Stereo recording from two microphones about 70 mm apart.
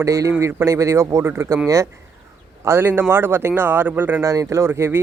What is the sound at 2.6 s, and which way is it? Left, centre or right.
Speech, right.